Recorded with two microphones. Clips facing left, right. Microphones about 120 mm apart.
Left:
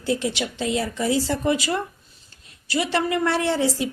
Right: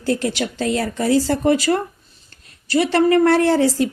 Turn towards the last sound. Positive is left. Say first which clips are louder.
# right 7 dB
turn(degrees=-45)  # may be behind; listen again after turning